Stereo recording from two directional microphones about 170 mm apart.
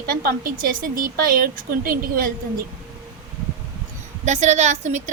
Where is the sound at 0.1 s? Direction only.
55° right (ahead or behind).